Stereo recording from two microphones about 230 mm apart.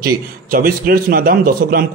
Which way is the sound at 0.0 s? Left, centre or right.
Right.